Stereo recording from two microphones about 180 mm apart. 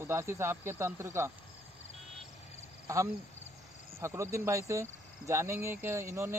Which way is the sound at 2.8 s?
15° right (ahead or behind).